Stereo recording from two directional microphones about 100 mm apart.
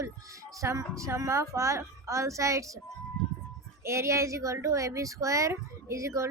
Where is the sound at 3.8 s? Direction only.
30° right (ahead or behind).